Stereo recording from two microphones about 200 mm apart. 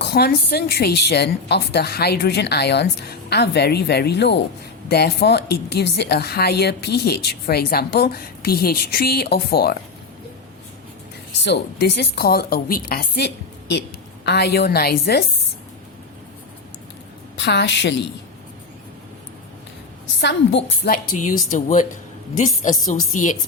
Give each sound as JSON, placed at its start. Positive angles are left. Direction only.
{"t": 0.0, "sound": "a woman's voice", "side_deg": 55}
{"t": 11.4, "sound": "a woman's voice", "side_deg": 55}
{"t": 17.3, "sound": "a woman's voice", "side_deg": 60}
{"t": 20.2, "sound": "a woman's voice", "side_deg": 60}
{"t": 20.9, "sound": "a woman's voice", "side_deg": 40}
{"t": 22.9, "sound": "a woman's voice", "side_deg": 40}